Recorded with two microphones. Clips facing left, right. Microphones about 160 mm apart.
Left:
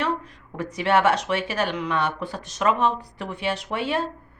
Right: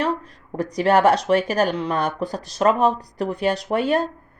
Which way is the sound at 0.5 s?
35° right (ahead or behind).